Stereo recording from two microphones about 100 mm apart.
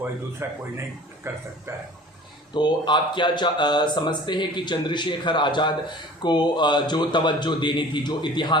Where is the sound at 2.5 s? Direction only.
50° left (ahead or behind).